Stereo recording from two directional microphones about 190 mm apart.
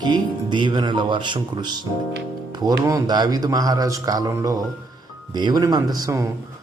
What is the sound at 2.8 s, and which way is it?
Speech, 20° right (ahead or behind).